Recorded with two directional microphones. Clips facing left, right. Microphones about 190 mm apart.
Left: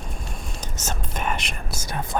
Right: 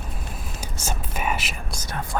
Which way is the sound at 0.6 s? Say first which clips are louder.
Right 1 dB; 10° right (ahead or behind).